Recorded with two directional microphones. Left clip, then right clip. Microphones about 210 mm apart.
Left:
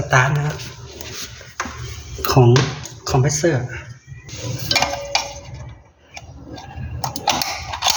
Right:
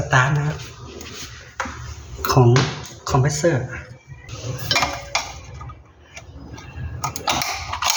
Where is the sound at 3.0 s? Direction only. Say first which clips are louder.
Left 1 dB; 10° left (ahead or behind).